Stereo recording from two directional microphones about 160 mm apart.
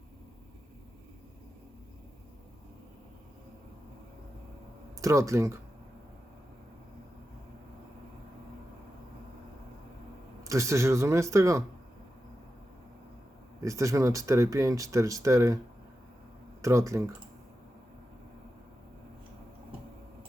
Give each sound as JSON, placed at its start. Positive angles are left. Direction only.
{"t": 4.9, "sound": "speech", "side_deg": -20}
{"t": 10.4, "sound": "speech", "side_deg": -20}
{"t": 13.6, "sound": "speech", "side_deg": -20}
{"t": 16.6, "sound": "speech", "side_deg": -20}